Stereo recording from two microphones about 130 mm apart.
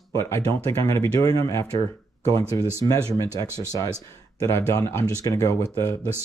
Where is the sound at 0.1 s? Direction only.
20° left (ahead or behind).